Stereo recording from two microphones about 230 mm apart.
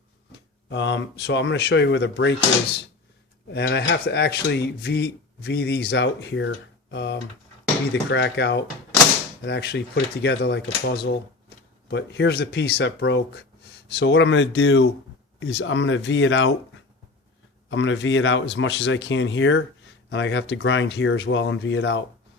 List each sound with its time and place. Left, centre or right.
0.3 s speech: left
3.5 s speech: left
17.7 s speech: left